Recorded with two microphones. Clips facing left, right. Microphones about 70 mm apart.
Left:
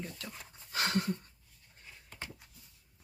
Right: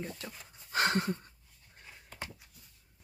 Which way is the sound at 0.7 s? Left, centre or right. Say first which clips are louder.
Right 3 dB; right.